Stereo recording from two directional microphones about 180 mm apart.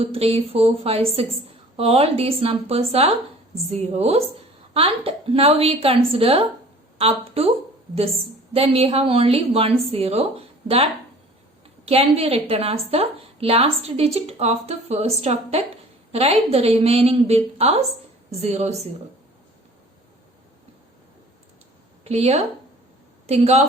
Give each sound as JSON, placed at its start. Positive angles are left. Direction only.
{"t": 0.0, "sound": "a woman's voice", "side_deg": -30}
{"t": 8.5, "sound": "a woman's voice", "side_deg": -35}
{"t": 11.9, "sound": "a woman's voice", "side_deg": -35}
{"t": 22.0, "sound": "speech", "side_deg": -35}